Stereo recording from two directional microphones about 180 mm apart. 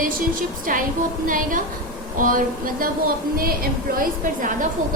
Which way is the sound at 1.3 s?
45° right (ahead or behind).